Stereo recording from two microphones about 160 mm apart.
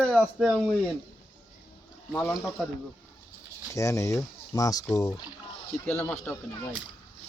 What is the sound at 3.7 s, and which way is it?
Speech, 20° left (ahead or behind).